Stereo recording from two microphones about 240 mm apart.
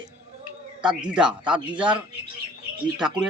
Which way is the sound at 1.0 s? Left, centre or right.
Centre.